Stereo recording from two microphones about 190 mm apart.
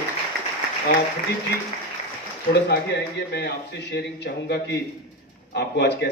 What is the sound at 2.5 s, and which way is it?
A man's voice, 60° left (ahead or behind).